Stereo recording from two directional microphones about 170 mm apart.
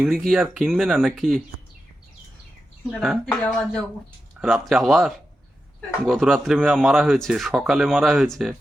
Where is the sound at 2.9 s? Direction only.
Centre (ahead or behind).